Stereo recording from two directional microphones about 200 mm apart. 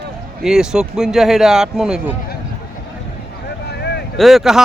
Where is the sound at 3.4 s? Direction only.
55° left (ahead or behind).